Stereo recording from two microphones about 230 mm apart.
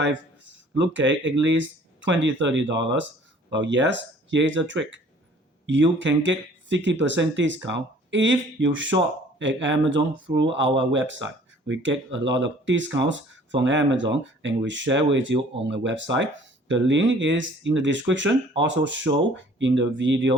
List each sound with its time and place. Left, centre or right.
0.8 s speech: right